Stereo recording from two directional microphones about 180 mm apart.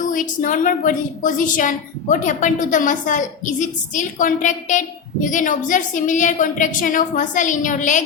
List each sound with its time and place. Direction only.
0.0 s a woman's voice: 45° left (ahead or behind)